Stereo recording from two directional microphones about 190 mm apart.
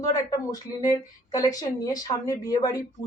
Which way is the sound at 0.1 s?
20° left (ahead or behind).